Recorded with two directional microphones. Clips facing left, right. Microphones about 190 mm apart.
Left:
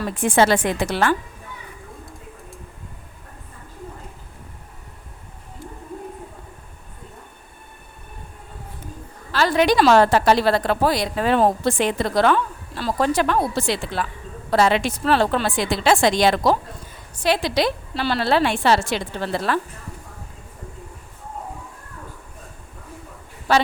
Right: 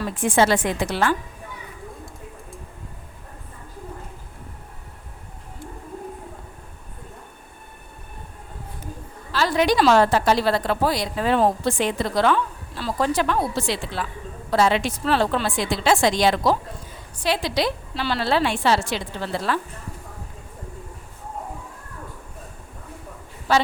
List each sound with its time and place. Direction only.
0.3 s a woman's voice: 60° left (ahead or behind)
9.3 s a woman's voice: 65° left (ahead or behind)